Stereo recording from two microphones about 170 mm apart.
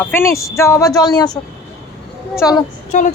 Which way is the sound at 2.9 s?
45° left (ahead or behind).